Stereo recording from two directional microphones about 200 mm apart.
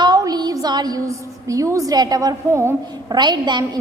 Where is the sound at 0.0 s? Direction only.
20° right (ahead or behind).